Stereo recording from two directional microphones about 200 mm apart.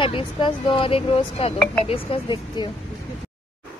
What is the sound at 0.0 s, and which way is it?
Speech, 25° left (ahead or behind).